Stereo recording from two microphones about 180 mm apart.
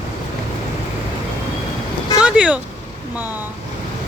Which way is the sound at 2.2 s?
5° right (ahead or behind).